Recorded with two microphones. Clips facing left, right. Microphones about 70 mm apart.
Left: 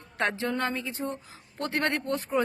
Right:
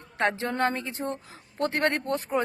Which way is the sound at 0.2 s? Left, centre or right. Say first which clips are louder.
Right 3 dB; right.